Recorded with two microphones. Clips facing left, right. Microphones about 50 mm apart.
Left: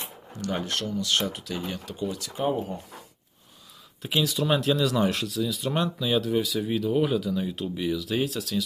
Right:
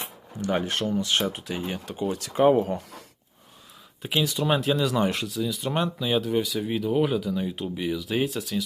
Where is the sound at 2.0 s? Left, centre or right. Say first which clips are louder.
Right 7 dB; right.